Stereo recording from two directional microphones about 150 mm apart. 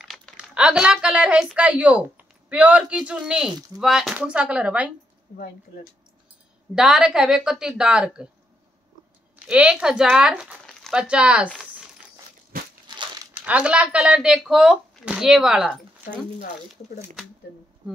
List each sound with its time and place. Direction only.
0.0 s speech: centre (ahead or behind)
6.7 s speech: 5° right (ahead or behind)
9.5 s speech: 5° right (ahead or behind)
12.8 s crumpling: 30° right (ahead or behind)
13.3 s speech: 10° right (ahead or behind)